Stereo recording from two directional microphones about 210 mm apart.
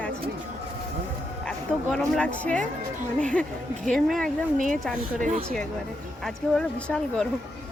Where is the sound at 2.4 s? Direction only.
5° left (ahead or behind).